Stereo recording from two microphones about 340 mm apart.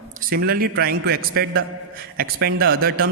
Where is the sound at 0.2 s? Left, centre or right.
Right.